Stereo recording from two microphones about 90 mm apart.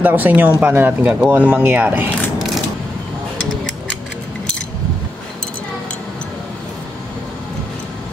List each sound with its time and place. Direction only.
0.0 s speech: 20° right (ahead or behind)